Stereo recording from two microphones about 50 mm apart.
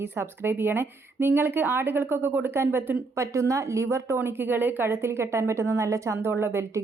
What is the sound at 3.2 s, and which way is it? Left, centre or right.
Speech, right.